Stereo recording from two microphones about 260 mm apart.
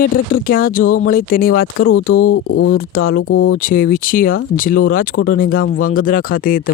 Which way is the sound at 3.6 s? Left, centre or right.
Left.